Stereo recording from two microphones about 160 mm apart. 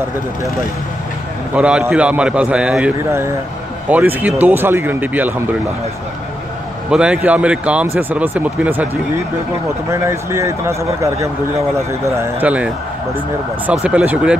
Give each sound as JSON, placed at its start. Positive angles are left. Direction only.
{"t": 1.5, "sound": "speech", "side_deg": -5}
{"t": 3.0, "sound": "speech", "side_deg": -15}
{"t": 6.9, "sound": "speech", "side_deg": -5}